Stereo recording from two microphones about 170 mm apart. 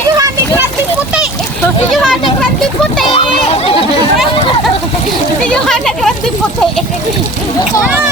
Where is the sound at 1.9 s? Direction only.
5° left (ahead or behind).